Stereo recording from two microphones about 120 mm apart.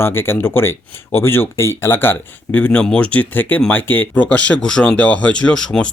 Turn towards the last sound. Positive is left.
turn(degrees=5)  # may be behind; listen again after turning